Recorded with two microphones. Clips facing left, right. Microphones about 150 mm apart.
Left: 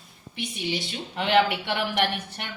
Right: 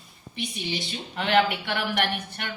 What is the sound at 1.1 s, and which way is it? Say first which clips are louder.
Speech: left 1 dB; 25° left (ahead or behind).